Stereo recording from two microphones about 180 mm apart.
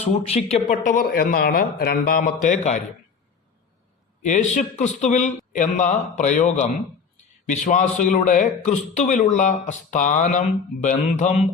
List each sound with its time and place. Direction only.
0.0 s a man's voice: 40° left (ahead or behind)
4.2 s a man's voice: 40° left (ahead or behind)